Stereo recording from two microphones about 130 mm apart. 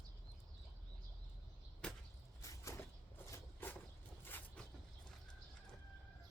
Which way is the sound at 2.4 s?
25° left (ahead or behind).